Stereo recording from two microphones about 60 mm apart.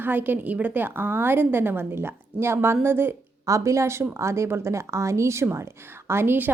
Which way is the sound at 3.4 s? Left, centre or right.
Right.